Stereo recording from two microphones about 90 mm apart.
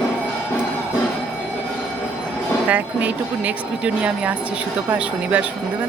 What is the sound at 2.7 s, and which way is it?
Speech, 20° right (ahead or behind).